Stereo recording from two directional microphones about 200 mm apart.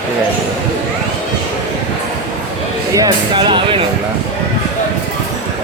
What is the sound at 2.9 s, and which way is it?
Speech, 20° right (ahead or behind).